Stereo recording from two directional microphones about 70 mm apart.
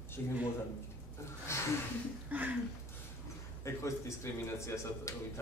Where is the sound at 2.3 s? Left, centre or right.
Right.